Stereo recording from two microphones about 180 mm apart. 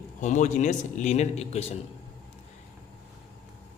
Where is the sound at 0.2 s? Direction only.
45° left (ahead or behind).